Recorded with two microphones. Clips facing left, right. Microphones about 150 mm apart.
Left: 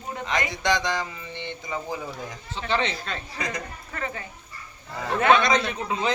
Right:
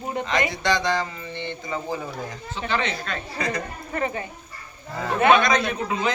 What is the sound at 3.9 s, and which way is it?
A woman's voice, 20° right (ahead or behind).